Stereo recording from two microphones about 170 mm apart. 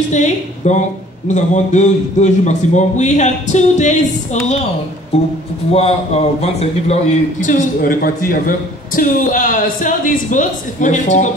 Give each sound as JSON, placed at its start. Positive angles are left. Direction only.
{"t": 0.1, "sound": "a man's voice", "side_deg": 45}